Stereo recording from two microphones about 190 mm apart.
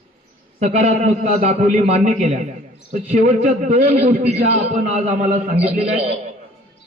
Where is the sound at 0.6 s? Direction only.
35° right (ahead or behind).